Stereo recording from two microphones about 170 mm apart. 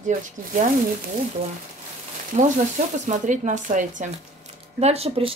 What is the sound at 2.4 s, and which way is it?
Speech, 45° right (ahead or behind).